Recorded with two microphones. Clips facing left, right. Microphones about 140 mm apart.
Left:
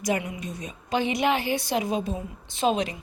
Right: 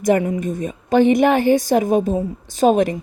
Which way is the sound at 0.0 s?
50° right (ahead or behind).